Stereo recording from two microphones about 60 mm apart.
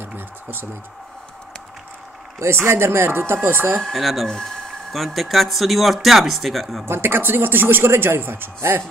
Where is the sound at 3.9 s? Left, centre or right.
Centre.